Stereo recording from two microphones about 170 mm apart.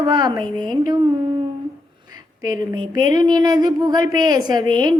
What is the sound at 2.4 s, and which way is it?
A woman's voice, 20° right (ahead or behind).